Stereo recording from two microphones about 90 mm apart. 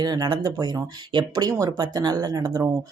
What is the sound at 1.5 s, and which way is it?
Speech, 45° right (ahead or behind).